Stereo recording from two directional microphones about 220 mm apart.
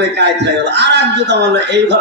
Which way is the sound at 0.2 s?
50° right (ahead or behind).